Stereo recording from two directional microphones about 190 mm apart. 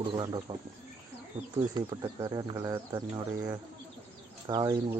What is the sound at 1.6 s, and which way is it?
Speech, 20° right (ahead or behind).